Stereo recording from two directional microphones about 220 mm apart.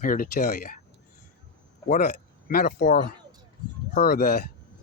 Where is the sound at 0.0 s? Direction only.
40° left (ahead or behind).